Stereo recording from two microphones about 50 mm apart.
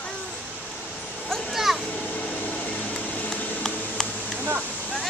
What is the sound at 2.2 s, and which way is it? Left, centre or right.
Air conditioning, left.